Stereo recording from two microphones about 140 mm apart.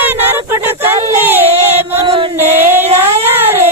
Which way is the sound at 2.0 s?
35° right (ahead or behind).